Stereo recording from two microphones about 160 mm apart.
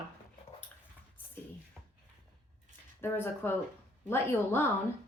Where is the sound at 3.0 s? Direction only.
15° left (ahead or behind).